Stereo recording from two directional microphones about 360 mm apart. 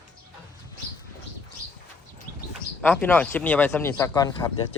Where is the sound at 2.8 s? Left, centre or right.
Centre.